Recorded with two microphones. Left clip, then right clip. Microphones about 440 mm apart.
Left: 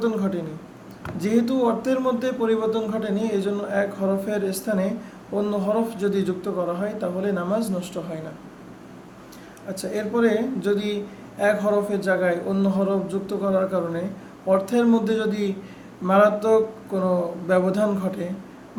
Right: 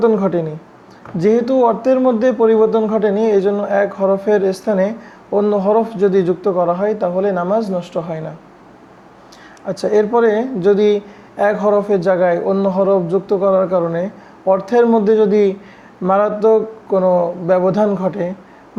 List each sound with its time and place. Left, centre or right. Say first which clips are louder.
0.0 s speech: right 11 dB; right
9.6 s speech: right 13 dB; right